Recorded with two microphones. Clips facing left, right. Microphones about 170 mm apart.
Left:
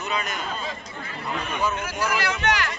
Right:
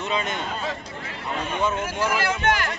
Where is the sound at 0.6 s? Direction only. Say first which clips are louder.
Right 3 dB; 80° right.